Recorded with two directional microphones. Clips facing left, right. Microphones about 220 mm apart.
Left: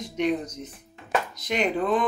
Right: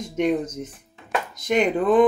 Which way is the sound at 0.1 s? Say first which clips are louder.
Right 4 dB; 50° right (ahead or behind).